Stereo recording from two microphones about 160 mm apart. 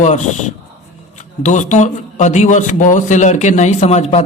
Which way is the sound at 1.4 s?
50° left (ahead or behind).